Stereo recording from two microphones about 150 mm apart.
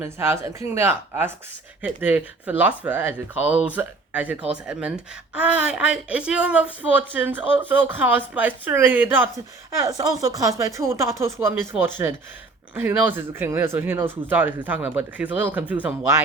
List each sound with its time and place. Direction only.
0.0 s speech: 15° right (ahead or behind)
9.8 s speech: 25° right (ahead or behind)